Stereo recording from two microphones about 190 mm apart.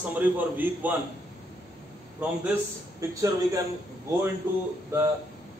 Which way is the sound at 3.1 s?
15° right (ahead or behind).